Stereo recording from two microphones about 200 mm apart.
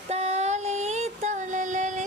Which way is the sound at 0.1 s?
35° right (ahead or behind).